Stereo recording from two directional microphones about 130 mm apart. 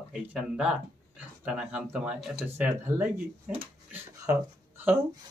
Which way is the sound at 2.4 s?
15° right (ahead or behind).